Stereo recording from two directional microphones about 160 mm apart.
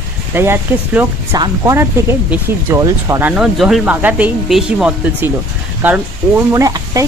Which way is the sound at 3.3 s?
5° right (ahead or behind).